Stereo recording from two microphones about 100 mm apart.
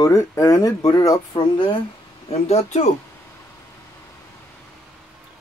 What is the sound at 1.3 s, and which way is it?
Speech, 50° left (ahead or behind).